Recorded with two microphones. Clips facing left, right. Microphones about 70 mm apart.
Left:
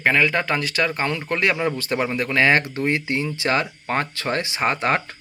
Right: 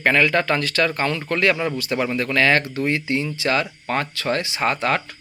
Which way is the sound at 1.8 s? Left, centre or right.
Left.